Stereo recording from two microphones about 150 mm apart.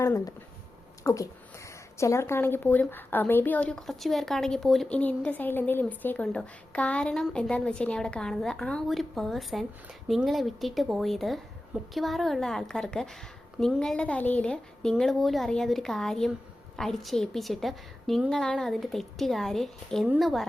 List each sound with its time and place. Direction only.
0.0 s a woman's voice: 20° left (ahead or behind); by 20.5 s centre (ahead or behind)